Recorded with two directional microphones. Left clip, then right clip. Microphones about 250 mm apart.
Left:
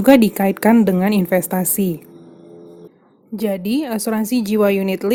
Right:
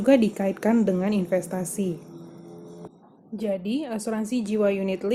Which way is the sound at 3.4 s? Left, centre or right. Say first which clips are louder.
Left 7 dB; left.